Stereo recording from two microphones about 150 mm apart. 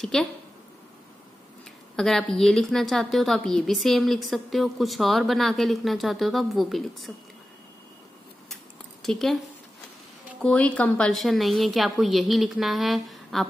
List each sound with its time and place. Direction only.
0.0 s a woman's voice: centre (ahead or behind)
2.0 s a woman's voice: 5° left (ahead or behind)
9.0 s a woman's voice: centre (ahead or behind)
10.4 s a woman's voice: 10° left (ahead or behind)